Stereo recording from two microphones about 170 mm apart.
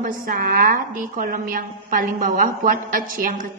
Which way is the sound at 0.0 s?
55° right (ahead or behind).